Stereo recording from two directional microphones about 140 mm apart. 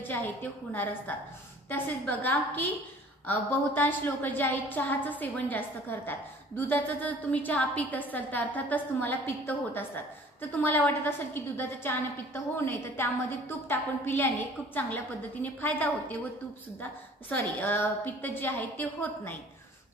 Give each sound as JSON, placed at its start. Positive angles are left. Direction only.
{"t": 0.0, "sound": "a woman's voice", "side_deg": 15}